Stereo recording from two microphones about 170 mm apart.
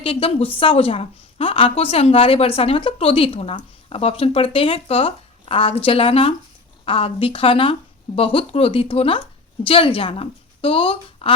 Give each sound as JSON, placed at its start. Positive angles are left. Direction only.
{"t": 0.0, "sound": "a woman's voice", "side_deg": 35}